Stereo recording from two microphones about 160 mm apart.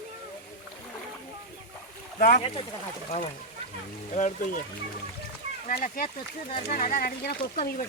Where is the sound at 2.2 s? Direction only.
55° left (ahead or behind).